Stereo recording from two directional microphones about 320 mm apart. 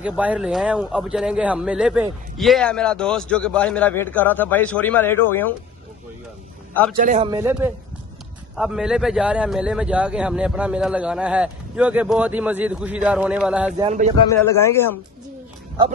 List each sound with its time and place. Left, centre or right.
0.0 s speech: centre
6.9 s a man's voice: right
7.2 s a man's voice: centre
13.8 s a man's voice: right
14.6 s speech: centre